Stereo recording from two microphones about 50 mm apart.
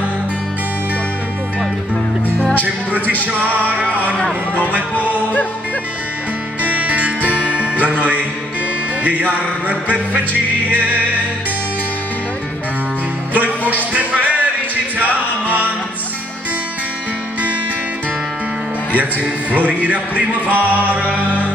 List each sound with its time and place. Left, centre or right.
2.6 s speech: right
3.3 s music: right
4.9 s music: left
6.6 s music: right
9.0 s speech: right
13.3 s music: right
18.9 s speech: right